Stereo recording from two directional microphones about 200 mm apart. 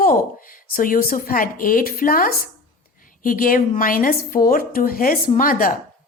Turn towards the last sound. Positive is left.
turn(degrees=45)  # may be behind; listen again after turning